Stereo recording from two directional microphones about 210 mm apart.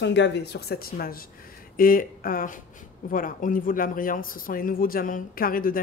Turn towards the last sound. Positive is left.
turn(degrees=40)  # may be behind; listen again after turning